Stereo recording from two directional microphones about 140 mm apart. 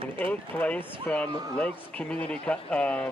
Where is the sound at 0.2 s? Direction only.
10° left (ahead or behind).